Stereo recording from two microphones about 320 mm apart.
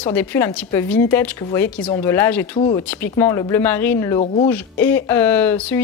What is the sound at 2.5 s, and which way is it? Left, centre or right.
Speech, centre.